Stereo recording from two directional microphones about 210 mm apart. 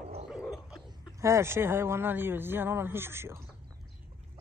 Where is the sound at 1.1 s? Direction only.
15° right (ahead or behind).